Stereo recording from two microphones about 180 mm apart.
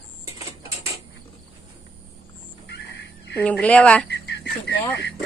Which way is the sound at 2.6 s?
70° left (ahead or behind).